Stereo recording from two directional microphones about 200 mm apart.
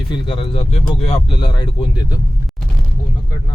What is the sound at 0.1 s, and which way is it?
Speech, 25° left (ahead or behind).